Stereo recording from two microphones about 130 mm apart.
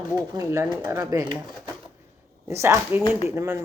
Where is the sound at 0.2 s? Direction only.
25° right (ahead or behind).